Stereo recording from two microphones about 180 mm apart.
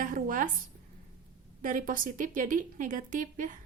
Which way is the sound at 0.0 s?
50° right (ahead or behind).